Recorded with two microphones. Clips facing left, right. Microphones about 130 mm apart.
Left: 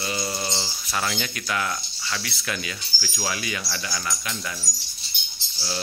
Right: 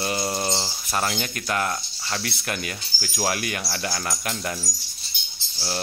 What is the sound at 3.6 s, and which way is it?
Speech, 45° right (ahead or behind).